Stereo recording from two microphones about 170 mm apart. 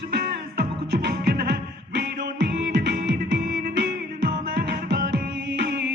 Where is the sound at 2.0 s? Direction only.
90° right.